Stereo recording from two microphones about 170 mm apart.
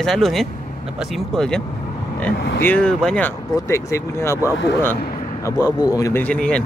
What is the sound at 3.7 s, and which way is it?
Speech, 15° left (ahead or behind).